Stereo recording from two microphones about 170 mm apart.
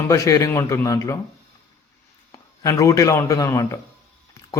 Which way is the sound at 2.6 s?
20° left (ahead or behind).